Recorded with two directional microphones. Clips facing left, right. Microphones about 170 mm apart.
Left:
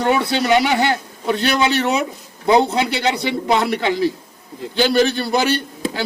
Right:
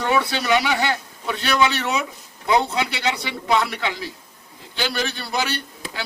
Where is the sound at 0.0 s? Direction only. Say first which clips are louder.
Left 4 dB; 30° left (ahead or behind).